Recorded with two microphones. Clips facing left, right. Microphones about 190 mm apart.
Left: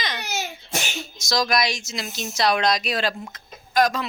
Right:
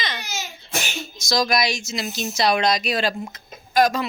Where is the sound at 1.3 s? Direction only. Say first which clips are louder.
Right 1 dB; centre (ahead or behind).